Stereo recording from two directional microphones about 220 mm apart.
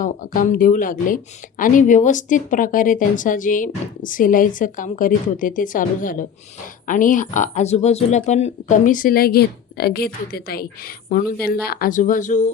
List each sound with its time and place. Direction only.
0.0 s speech: 40° left (ahead or behind)